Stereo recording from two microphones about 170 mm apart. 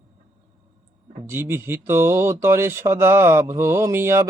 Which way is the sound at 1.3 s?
15° right (ahead or behind).